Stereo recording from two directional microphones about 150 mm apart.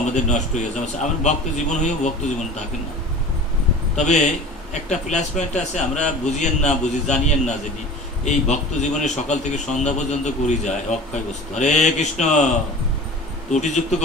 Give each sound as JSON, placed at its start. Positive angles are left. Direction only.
{"t": 0.1, "sound": "a man's voice", "side_deg": 50}
{"t": 3.9, "sound": "a man's voice", "side_deg": 50}
{"t": 13.5, "sound": "a man's voice", "side_deg": 50}